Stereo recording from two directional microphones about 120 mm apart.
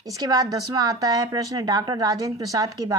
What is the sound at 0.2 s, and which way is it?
A woman's voice, 30° right (ahead or behind).